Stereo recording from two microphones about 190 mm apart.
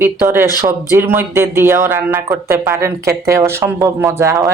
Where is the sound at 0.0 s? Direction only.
10° right (ahead or behind).